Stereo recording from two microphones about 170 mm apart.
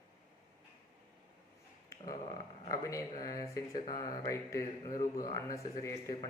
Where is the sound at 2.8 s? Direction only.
20° left (ahead or behind).